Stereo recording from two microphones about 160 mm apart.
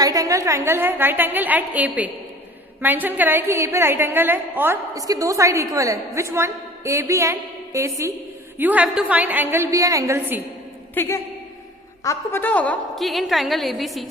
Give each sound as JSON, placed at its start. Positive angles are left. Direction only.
{"t": 0.0, "sound": "a woman's voice", "side_deg": -20}
{"t": 10.9, "sound": "a woman's voice", "side_deg": 15}